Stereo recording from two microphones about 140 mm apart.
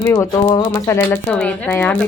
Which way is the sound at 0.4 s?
30° left (ahead or behind).